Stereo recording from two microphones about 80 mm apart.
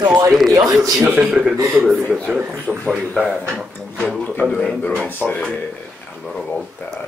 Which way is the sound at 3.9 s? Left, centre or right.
Centre.